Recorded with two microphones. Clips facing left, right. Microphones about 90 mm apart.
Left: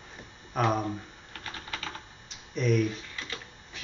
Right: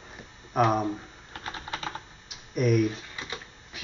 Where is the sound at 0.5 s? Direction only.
10° right (ahead or behind).